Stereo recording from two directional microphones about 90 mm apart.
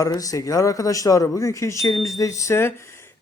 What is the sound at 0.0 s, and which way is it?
A man's voice, 40° left (ahead or behind).